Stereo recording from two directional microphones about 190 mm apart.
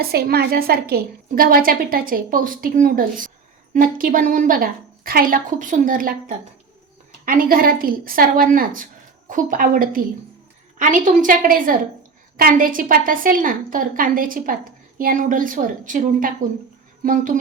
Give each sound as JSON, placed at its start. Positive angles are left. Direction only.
{"t": 0.0, "sound": "a woman's voice", "side_deg": -55}